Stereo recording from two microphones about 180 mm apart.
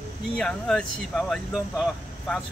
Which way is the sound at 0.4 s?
5° left (ahead or behind).